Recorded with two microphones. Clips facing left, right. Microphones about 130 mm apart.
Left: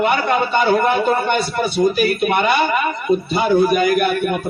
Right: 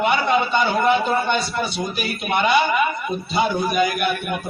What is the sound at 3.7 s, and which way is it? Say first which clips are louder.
Speech: left 5 dB; 50° left (ahead or behind).